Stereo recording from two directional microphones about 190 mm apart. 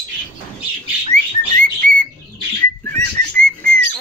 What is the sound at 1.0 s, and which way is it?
Bird, 45° right (ahead or behind).